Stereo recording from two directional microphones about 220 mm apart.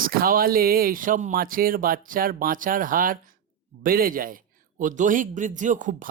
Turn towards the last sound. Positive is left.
turn(degrees=-35)  # may be behind; listen again after turning